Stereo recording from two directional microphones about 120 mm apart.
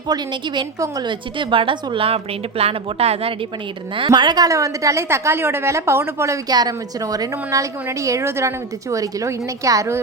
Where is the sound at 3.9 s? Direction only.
40° right (ahead or behind).